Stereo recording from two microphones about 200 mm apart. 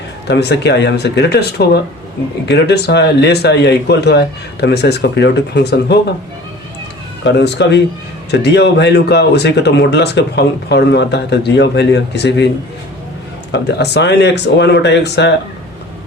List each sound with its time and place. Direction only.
0.3 s speech: 55° left (ahead or behind)
7.3 s speech: 60° left (ahead or behind)
13.5 s speech: 55° left (ahead or behind)